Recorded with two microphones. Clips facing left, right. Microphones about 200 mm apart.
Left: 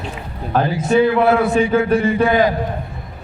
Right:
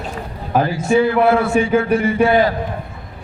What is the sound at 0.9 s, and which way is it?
A man's voice, 20° left (ahead or behind).